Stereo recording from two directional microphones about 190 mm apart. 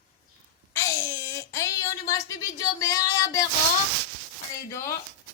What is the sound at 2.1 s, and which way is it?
Speech, 15° left (ahead or behind).